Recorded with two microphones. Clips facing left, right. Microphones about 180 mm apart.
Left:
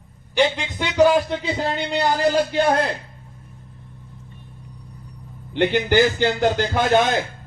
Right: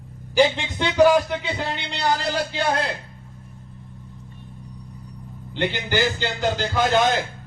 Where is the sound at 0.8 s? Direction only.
15° left (ahead or behind).